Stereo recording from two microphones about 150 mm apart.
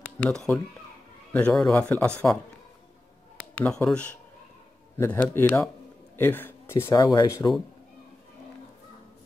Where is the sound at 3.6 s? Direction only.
5° left (ahead or behind); by 7.6 s 25° left (ahead or behind).